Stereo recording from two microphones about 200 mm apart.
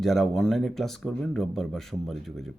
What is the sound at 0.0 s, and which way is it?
Speech, centre (ahead or behind).